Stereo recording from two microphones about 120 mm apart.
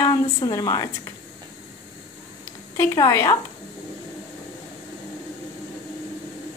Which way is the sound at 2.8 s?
25° left (ahead or behind).